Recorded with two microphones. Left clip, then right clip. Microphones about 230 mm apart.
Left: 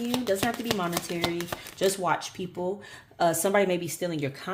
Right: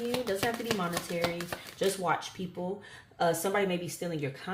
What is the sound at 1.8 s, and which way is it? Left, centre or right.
Speech, left.